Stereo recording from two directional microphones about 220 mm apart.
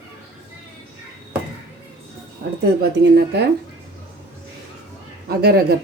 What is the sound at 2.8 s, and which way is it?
Speech, 45° right (ahead or behind).